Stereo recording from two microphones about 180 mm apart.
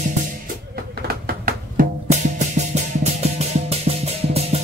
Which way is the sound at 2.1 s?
40° right (ahead or behind).